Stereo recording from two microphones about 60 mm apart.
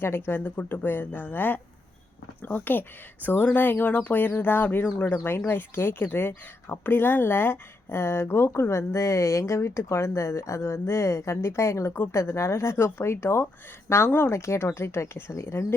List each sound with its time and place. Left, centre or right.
0.0 s speech: left